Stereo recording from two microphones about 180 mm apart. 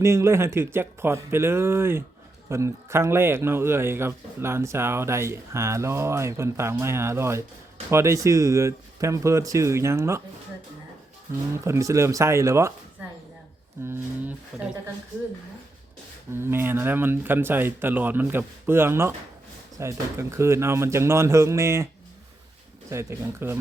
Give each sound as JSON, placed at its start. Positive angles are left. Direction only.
{"t": 0.0, "sound": "a man's voice", "side_deg": -15}
{"t": 11.5, "sound": "a man's voice", "side_deg": -15}
{"t": 16.3, "sound": "a man's voice", "side_deg": -15}
{"t": 22.9, "sound": "a man's voice", "side_deg": -15}